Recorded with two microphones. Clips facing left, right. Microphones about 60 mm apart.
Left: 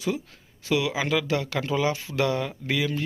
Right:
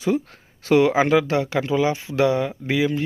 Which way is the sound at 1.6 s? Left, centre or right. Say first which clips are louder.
Right 4 dB; centre.